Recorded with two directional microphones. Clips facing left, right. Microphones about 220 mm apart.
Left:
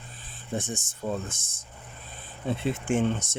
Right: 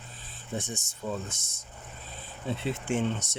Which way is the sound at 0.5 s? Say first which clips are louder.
Left 3 dB; 50° left (ahead or behind).